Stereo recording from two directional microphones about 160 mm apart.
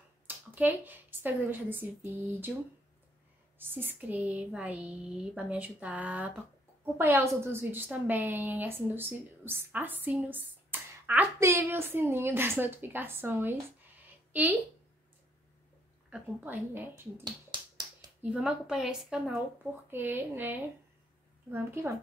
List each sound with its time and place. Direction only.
0.6 s a woman's voice: 10° right (ahead or behind)
3.5 s a woman's voice: 10° right (ahead or behind)
16.1 s a woman's voice: 10° right (ahead or behind)
17.2 s finger snapping: 25° right (ahead or behind)
18.3 s a woman's voice: 5° right (ahead or behind)